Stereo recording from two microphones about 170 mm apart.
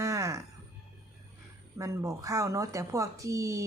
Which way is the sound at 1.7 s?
20° right (ahead or behind).